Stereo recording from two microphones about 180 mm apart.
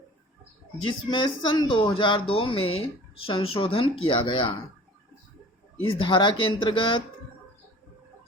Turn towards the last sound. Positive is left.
turn(degrees=30)  # may be behind; listen again after turning